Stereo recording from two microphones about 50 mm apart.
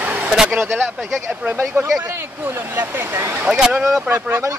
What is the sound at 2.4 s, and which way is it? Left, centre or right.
Speech, right.